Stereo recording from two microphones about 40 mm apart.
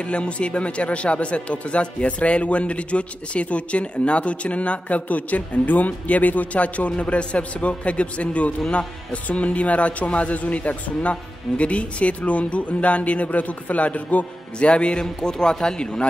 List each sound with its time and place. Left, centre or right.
0.0 s speech: left
9.1 s speech: left